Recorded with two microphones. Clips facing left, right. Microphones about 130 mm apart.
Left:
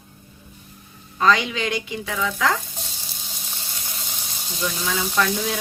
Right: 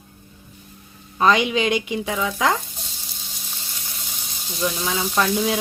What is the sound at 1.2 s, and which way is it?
Speech, 20° right (ahead or behind).